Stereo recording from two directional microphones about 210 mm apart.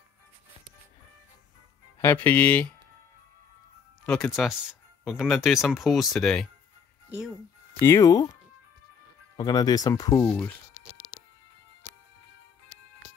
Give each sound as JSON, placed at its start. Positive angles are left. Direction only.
{"t": 2.0, "sound": "speech", "side_deg": 10}
{"t": 4.0, "sound": "speech", "side_deg": 5}
{"t": 7.8, "sound": "speech", "side_deg": 15}
{"t": 9.4, "sound": "speech", "side_deg": 20}